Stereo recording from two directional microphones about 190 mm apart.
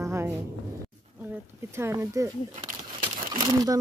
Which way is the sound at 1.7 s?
15° right (ahead or behind).